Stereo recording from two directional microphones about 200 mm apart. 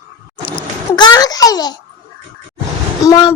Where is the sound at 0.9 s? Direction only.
20° left (ahead or behind).